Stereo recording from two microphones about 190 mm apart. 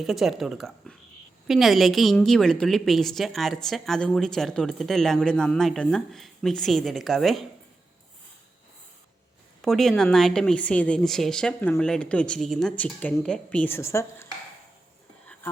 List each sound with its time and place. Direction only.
0.0 s speech: centre (ahead or behind)
9.6 s speech: centre (ahead or behind)